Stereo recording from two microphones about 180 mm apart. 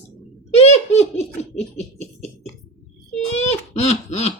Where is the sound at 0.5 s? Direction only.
35° left (ahead or behind).